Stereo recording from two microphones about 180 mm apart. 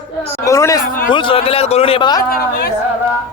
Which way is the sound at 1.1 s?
30° left (ahead or behind).